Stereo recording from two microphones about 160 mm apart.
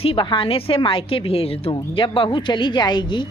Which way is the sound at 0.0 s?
35° left (ahead or behind).